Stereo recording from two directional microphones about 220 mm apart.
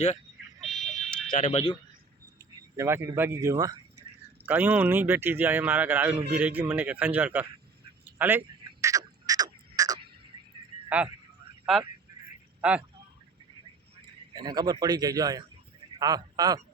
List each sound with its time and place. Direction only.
0.6 s a sound: centre (ahead or behind)
1.3 s speech: 30° left (ahead or behind)
2.4 s speech: 10° right (ahead or behind)
8.2 s a sound: 10° right (ahead or behind)
10.8 s a man's voice: 5° right (ahead or behind)
14.3 s a man's voice: 20° right (ahead or behind)